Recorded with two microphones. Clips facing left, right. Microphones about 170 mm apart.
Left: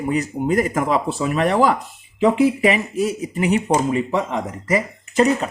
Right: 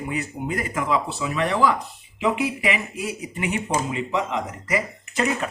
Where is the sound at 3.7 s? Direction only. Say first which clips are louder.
Left 6 dB; 50° left (ahead or behind).